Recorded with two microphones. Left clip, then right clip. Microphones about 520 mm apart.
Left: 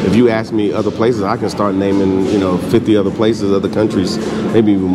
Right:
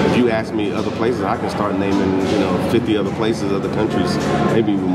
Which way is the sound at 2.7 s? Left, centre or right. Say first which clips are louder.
Left 5 dB; left.